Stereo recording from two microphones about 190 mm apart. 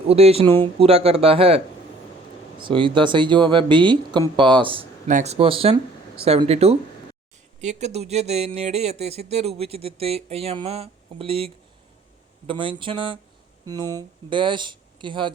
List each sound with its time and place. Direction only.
0.1 s speech: 30° right (ahead or behind)
5.0 s speech: 40° right (ahead or behind)